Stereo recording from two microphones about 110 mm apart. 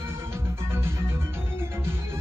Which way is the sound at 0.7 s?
20° right (ahead or behind).